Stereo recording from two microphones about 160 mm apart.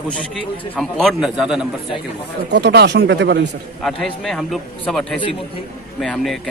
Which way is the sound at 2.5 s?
90° right.